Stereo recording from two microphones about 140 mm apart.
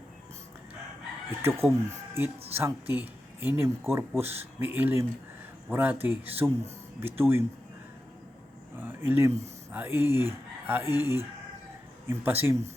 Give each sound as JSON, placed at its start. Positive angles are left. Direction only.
{"t": 1.4, "sound": "speech", "side_deg": -15}
{"t": 8.8, "sound": "speech", "side_deg": -15}